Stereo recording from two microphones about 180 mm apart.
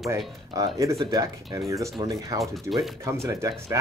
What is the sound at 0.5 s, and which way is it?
Speech, 20° right (ahead or behind).